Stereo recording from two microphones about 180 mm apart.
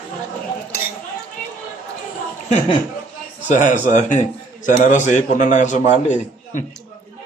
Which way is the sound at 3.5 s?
45° left (ahead or behind).